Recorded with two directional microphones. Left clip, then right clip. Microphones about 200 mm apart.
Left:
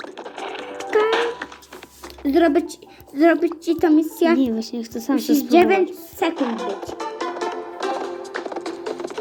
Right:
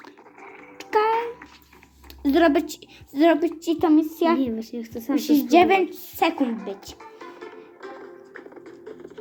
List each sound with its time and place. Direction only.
0.2 s music: 45° left (ahead or behind)
0.9 s music: 10° right (ahead or behind)
1.1 s music: 45° left (ahead or behind)
2.2 s a woman's voice: 10° right (ahead or behind)
4.4 s a woman's voice: 25° left (ahead or behind)
5.5 s a woman's voice: 10° right (ahead or behind)
6.4 s music: 45° left (ahead or behind)